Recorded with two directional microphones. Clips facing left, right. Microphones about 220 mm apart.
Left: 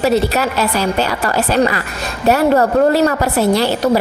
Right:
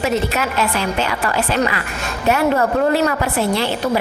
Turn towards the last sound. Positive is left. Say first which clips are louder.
# left 5 dB
turn(degrees=40)  # may be behind; listen again after turning